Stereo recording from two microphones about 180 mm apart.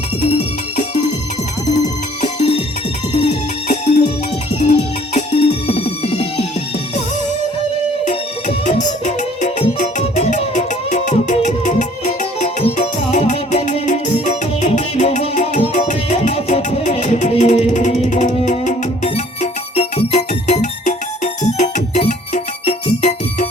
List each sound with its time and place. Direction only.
2.2 s music: 40° left (ahead or behind)
8.0 s music: 40° left (ahead or behind)